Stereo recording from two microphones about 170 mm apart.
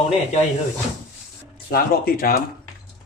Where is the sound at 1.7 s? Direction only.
60° left (ahead or behind).